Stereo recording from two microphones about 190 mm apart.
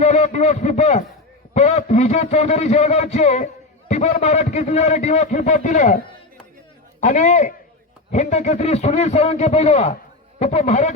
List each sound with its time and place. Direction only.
0.0 s a man's voice: 35° left (ahead or behind)
7.0 s a man's voice: 40° left (ahead or behind)